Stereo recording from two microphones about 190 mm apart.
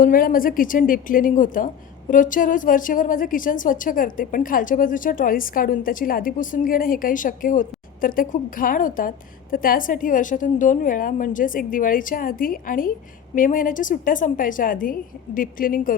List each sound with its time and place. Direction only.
0.0 s a woman's voice: 50° left (ahead or behind)